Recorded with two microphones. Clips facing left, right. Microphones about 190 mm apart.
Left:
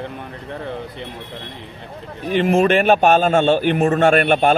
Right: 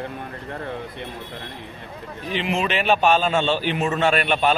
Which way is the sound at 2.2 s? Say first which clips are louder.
Left 9 dB; 50° left (ahead or behind).